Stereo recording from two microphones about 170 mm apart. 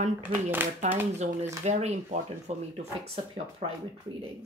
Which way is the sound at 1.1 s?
40° right (ahead or behind).